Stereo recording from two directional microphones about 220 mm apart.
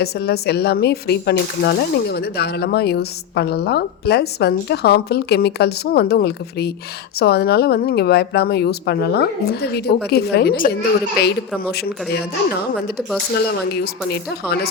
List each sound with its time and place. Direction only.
0.0 s speech: 45° left (ahead or behind)
13.3 s speech: 45° left (ahead or behind)